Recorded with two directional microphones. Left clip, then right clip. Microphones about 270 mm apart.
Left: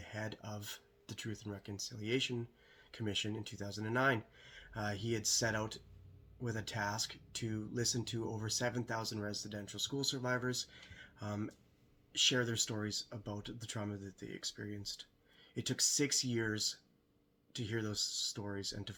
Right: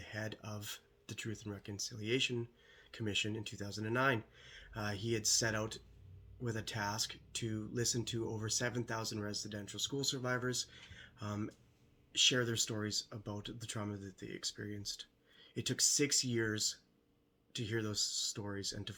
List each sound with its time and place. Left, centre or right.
0.0 s speech: centre